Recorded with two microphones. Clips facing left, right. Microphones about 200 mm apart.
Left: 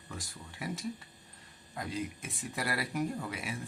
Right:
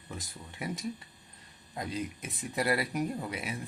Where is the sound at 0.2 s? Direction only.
20° right (ahead or behind).